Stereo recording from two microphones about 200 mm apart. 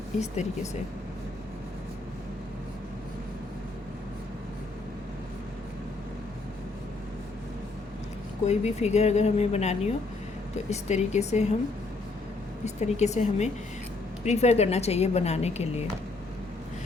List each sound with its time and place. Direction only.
0.2 s a woman's voice: 35° left (ahead or behind)
8.4 s a woman's voice: 35° left (ahead or behind)
12.6 s a woman's voice: 35° left (ahead or behind)